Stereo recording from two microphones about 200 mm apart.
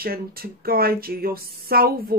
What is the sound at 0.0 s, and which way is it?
Speech, 50° right (ahead or behind).